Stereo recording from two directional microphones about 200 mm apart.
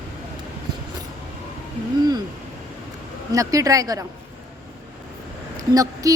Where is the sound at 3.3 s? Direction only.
15° right (ahead or behind).